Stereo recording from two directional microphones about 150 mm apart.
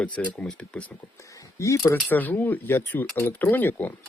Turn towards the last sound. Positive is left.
turn(degrees=10)  # may be behind; listen again after turning